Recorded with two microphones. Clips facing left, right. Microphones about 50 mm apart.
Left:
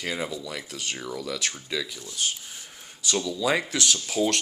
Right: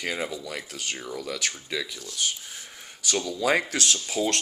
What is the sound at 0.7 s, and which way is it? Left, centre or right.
Speech, right.